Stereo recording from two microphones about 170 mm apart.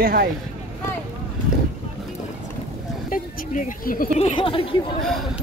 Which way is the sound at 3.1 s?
50° left (ahead or behind).